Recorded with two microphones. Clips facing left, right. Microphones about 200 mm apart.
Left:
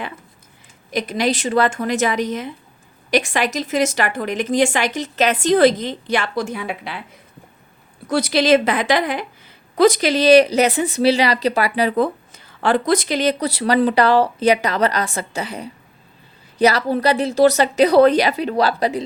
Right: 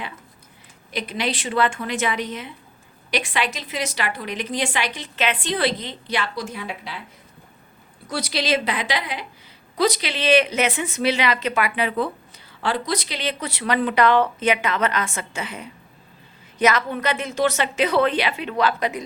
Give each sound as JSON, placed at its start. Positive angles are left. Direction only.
{"t": 0.9, "sound": "a woman's voice", "side_deg": 45}
{"t": 8.0, "sound": "a woman's voice", "side_deg": 50}